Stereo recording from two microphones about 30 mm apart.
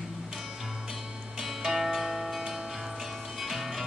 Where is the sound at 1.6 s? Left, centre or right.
Centre.